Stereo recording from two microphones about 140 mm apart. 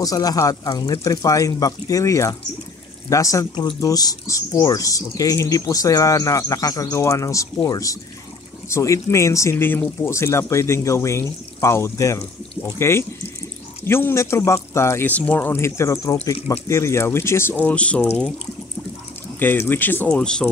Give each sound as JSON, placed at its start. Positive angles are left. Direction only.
{"t": 0.0, "sound": "speech", "side_deg": 25}
{"t": 19.4, "sound": "speech", "side_deg": 15}